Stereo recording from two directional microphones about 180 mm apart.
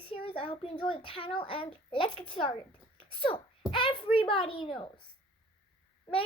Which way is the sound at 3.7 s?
25° left (ahead or behind).